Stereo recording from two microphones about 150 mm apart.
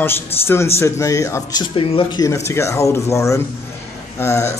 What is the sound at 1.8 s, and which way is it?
Speech, 35° left (ahead or behind).